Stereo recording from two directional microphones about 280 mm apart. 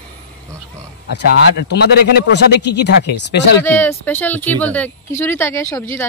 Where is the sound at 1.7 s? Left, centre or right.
Left.